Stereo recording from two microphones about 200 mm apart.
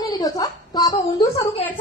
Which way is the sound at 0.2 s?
20° left (ahead or behind).